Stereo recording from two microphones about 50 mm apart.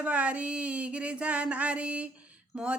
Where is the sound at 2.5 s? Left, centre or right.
Right.